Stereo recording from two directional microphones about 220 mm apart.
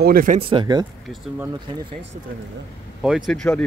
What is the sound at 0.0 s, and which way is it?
Speech, 40° right (ahead or behind).